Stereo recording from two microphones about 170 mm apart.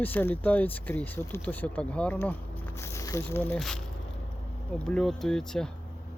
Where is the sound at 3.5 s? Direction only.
Centre (ahead or behind).